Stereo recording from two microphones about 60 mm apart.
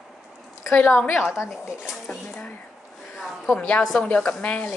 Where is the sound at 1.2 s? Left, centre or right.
Centre.